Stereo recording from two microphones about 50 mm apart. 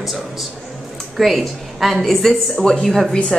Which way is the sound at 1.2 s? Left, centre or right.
Centre.